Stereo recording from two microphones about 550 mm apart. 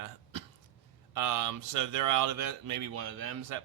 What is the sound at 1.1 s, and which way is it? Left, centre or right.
Speech, right.